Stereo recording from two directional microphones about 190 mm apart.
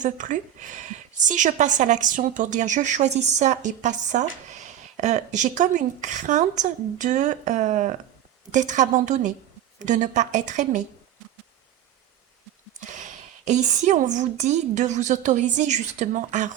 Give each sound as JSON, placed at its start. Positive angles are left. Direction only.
{"t": 0.0, "sound": "speech", "side_deg": -40}
{"t": 12.8, "sound": "speech", "side_deg": -40}